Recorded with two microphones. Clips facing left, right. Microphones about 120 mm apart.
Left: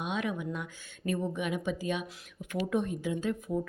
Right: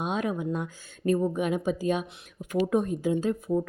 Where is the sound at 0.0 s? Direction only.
40° right (ahead or behind).